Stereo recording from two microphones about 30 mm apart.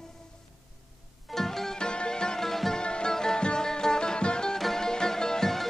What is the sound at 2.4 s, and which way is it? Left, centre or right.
Music, centre.